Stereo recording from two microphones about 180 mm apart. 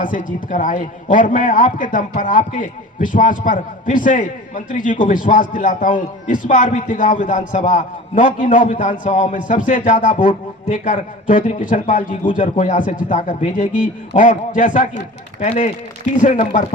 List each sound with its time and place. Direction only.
0.0 s a man's voice: 50° left (ahead or behind)